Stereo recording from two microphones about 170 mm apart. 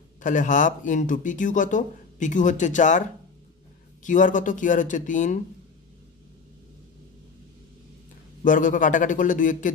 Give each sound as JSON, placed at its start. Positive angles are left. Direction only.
{"t": 0.2, "sound": "speech", "side_deg": 50}
{"t": 8.5, "sound": "speech", "side_deg": 50}